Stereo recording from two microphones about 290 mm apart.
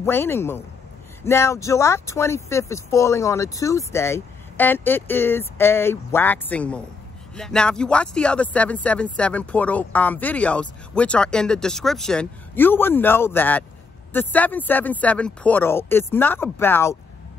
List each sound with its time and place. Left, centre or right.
0.0 s speech: centre